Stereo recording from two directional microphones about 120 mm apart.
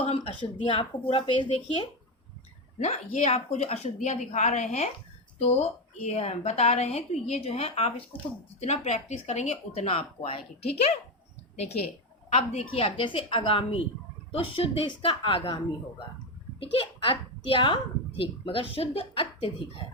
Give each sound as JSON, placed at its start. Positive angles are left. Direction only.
{"t": 0.6, "sound": "a woman's voice", "side_deg": 45}
{"t": 2.7, "sound": "a woman's voice", "side_deg": 65}
{"t": 9.8, "sound": "a woman's voice", "side_deg": 50}